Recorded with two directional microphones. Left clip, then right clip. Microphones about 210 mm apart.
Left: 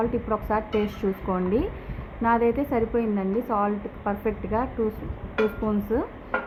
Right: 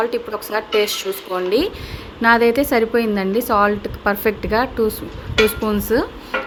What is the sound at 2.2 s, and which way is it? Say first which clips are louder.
A woman's voice: right 8 dB; 30° right (ahead or behind).